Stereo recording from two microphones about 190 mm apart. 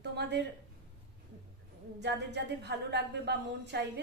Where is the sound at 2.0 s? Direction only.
65° right (ahead or behind).